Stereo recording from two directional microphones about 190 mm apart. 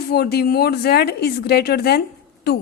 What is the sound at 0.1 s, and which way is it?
A woman's voice, 55° left (ahead or behind).